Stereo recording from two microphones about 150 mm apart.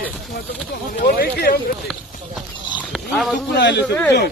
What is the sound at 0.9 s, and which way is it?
Speech, 90° left.